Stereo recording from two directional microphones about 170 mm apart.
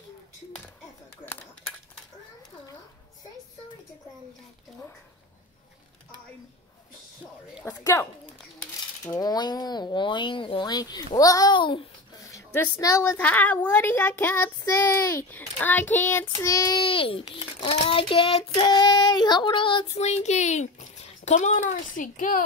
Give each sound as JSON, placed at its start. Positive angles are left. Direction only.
{"t": 1.2, "sound": "a sound", "side_deg": 10}
{"t": 7.6, "sound": "a woman's voice", "side_deg": 15}
{"t": 12.3, "sound": "a woman's voice", "side_deg": 15}